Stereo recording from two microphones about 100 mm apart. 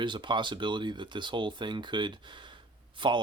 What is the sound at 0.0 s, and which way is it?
Speech, 50° right (ahead or behind).